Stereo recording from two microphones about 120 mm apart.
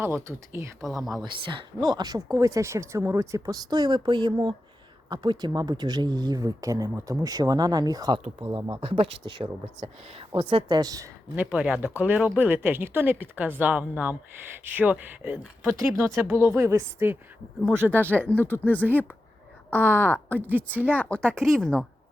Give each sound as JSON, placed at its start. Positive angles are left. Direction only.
{"t": 0.0, "sound": "speech", "side_deg": -20}
{"t": 0.9, "sound": "speech", "side_deg": 0}
{"t": 1.2, "sound": "speech", "side_deg": -40}
{"t": 8.8, "sound": "a woman's voice", "side_deg": -50}
{"t": 10.8, "sound": "speech", "side_deg": -30}
{"t": 11.3, "sound": "speech", "side_deg": -5}
{"t": 17.9, "sound": "speech", "side_deg": 15}
{"t": 20.5, "sound": "speech", "side_deg": -15}
{"t": 20.9, "sound": "speech", "side_deg": 10}